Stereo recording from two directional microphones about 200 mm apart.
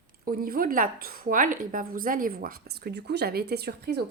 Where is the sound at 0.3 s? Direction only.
45° right (ahead or behind).